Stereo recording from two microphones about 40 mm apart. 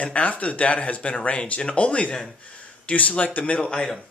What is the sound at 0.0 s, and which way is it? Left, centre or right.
Speech, left.